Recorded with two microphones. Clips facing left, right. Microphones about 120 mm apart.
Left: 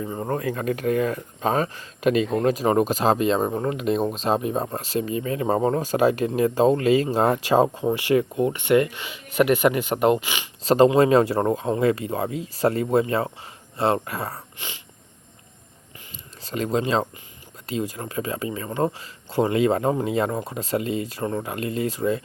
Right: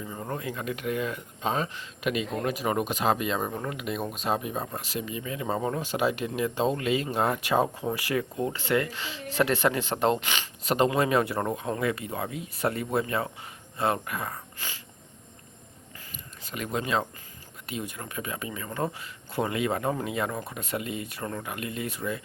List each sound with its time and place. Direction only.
0.1 s speech: 40° left (ahead or behind); by 10.5 s 10° left (ahead or behind)
10.6 s speech: 35° left (ahead or behind)
16.4 s speech: 35° left (ahead or behind)